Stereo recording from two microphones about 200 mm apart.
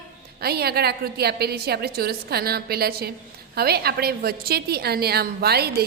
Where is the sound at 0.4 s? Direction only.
50° right (ahead or behind).